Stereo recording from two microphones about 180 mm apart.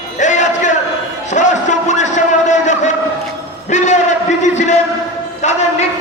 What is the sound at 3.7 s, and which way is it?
Music, 40° left (ahead or behind).